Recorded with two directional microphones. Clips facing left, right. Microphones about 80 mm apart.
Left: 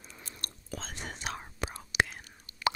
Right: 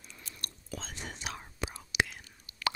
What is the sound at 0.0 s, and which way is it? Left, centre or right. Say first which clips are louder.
Whispering: left 2 dB; left.